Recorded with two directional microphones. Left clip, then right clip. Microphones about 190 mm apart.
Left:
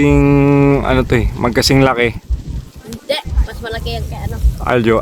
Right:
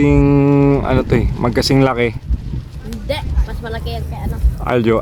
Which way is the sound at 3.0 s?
40° left (ahead or behind).